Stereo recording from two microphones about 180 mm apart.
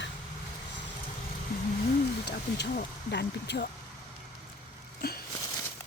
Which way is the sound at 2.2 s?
65° left (ahead or behind).